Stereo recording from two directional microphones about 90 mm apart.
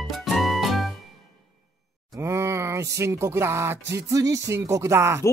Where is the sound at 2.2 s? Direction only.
30° right (ahead or behind).